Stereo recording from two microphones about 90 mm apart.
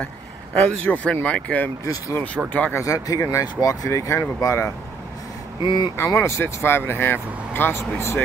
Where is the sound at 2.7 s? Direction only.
40° left (ahead or behind).